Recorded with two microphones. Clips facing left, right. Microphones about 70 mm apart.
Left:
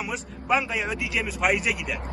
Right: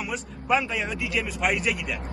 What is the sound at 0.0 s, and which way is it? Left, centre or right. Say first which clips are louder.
A man's voice: even; centre.